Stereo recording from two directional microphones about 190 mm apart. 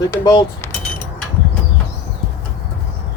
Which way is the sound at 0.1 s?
15° left (ahead or behind).